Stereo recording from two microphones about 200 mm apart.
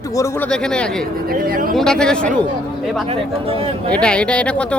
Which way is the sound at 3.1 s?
30° right (ahead or behind).